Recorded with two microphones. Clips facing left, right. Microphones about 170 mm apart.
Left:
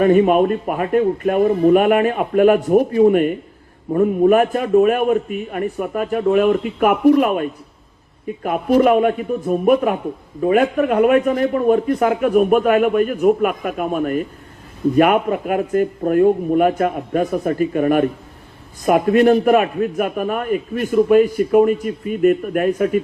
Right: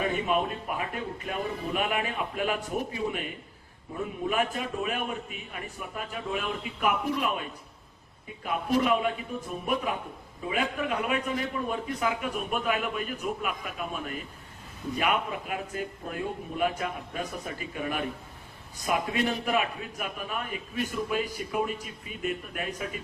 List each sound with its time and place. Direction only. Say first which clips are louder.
0.0 s a man's voice: left 15 dB; 55° left (ahead or behind)
8.4 s a man's voice: left 11 dB; 55° left (ahead or behind)